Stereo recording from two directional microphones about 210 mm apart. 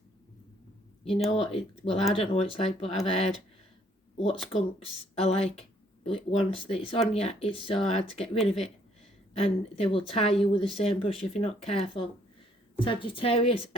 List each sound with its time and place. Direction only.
1.0 s speech: centre (ahead or behind)
1.3 s speech: 30° left (ahead or behind)
4.5 s speech: 30° left (ahead or behind)